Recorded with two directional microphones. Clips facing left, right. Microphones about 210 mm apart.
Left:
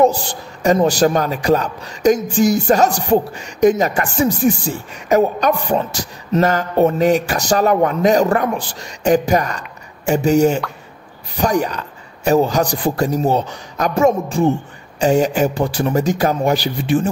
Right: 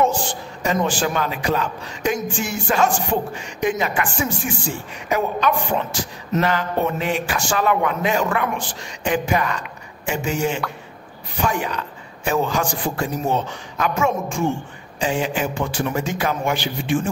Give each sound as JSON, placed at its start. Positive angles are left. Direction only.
{"t": 0.0, "sound": "a man's voice", "side_deg": 40}